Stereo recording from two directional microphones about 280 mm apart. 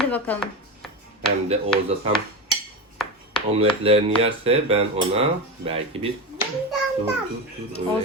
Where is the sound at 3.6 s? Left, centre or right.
Right.